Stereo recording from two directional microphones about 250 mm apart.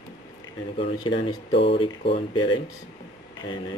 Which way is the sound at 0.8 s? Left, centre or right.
Centre.